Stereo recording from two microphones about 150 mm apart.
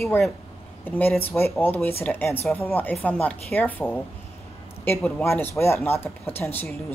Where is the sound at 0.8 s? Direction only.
15° left (ahead or behind).